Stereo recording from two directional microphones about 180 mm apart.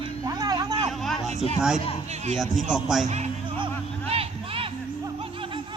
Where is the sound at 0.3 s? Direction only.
20° right (ahead or behind).